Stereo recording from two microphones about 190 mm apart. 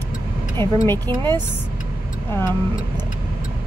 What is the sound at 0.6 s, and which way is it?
Speech, 15° left (ahead or behind).